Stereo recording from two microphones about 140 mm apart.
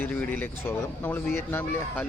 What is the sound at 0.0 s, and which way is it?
Speech, 10° left (ahead or behind).